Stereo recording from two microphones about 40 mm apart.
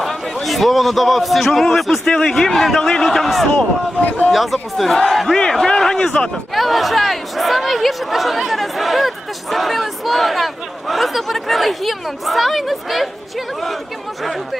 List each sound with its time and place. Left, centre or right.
0.4 s a man's voice: centre
6.5 s speech: centre